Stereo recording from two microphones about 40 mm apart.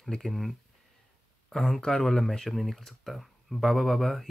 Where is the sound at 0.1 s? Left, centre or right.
Centre.